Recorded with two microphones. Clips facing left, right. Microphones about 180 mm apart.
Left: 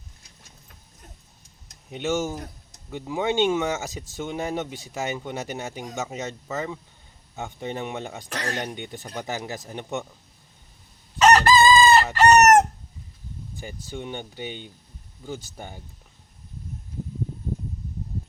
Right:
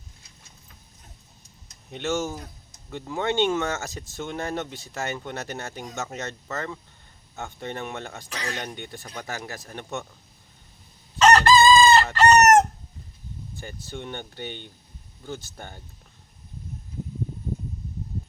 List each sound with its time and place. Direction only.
1.9 s speech: 15° left (ahead or behind)
8.3 s speech: 45° left (ahead or behind)
8.5 s speech: 15° left (ahead or behind)
11.2 s chicken: 15° left (ahead or behind)
13.6 s speech: 15° left (ahead or behind)